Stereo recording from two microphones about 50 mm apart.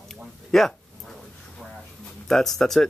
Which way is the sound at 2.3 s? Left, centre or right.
Centre.